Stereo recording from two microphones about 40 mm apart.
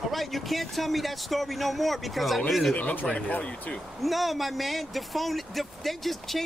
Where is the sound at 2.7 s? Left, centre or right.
Left.